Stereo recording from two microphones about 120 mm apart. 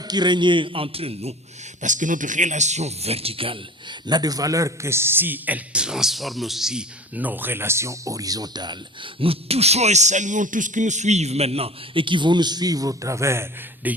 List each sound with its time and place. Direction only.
0.0 s a man's voice: 35° right (ahead or behind); by 1.4 s 55° right (ahead or behind)
1.8 s a man's voice: 90° right; by 13.9 s 20° right (ahead or behind)